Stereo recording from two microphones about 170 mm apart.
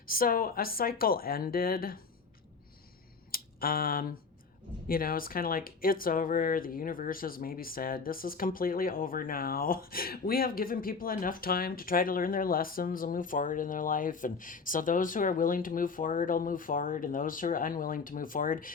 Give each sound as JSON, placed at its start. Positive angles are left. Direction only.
{"t": 0.0, "sound": "speech", "side_deg": 55}
{"t": 3.3, "sound": "a sound", "side_deg": 60}
{"t": 4.9, "sound": "speech", "side_deg": 60}